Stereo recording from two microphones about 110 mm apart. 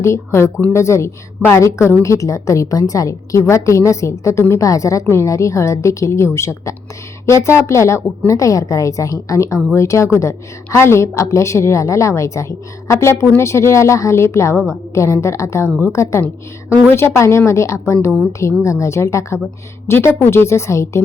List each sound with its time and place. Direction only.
0.0 s a woman's voice: 25° left (ahead or behind)